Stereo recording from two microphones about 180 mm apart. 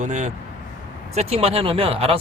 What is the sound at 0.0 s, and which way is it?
Speech, 40° right (ahead or behind).